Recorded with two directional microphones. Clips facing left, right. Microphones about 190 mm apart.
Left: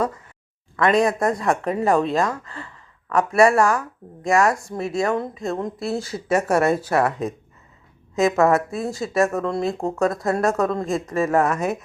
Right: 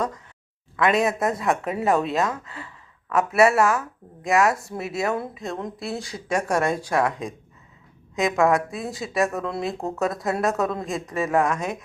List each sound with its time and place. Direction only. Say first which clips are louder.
0.8 s speech: left 3 dB; 5° right (ahead or behind)